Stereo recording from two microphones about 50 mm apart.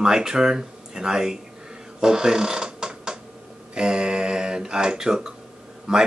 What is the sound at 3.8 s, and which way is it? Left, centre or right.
Speech, centre.